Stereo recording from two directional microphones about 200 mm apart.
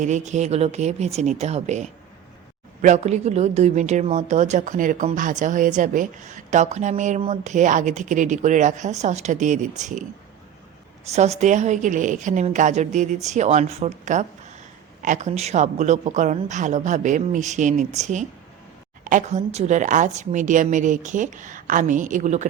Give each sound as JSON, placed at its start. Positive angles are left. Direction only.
{"t": 0.0, "sound": "a woman's voice", "side_deg": -35}
{"t": 11.1, "sound": "a woman's voice", "side_deg": -35}